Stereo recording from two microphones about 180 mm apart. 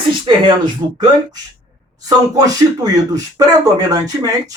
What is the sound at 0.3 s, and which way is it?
Speech, 25° right (ahead or behind).